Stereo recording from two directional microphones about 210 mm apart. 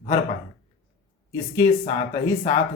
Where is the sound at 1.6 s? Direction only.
20° left (ahead or behind).